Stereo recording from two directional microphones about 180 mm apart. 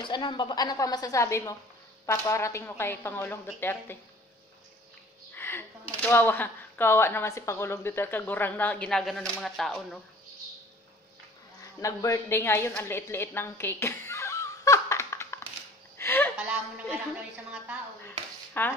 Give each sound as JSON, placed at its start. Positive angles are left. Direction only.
{"t": 0.0, "sound": "a woman's voice", "side_deg": 25}
{"t": 5.3, "sound": "speech", "side_deg": 10}
{"t": 11.6, "sound": "a woman's voice", "side_deg": 20}
{"t": 16.0, "sound": "a sound", "side_deg": 10}
{"t": 18.6, "sound": "a woman's voice", "side_deg": 10}